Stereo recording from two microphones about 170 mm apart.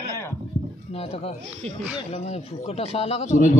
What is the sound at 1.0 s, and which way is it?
A man's voice, 40° left (ahead or behind).